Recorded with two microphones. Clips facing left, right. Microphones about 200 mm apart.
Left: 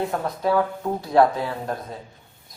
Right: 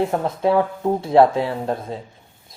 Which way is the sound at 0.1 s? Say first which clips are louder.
Right 4 dB; 25° right (ahead or behind).